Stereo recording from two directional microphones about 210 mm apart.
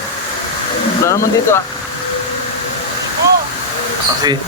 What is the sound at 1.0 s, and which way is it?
Speech, 15° left (ahead or behind).